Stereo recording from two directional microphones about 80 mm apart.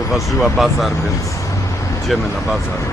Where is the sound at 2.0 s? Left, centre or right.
Centre.